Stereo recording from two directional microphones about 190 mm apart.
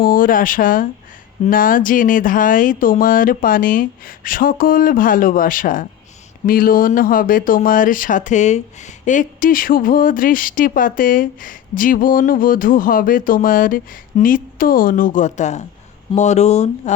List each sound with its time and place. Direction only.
0.0 s speech: 45° left (ahead or behind)